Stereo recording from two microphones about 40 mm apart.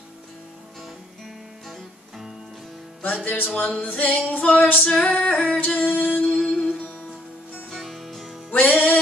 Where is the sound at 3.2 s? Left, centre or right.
Left.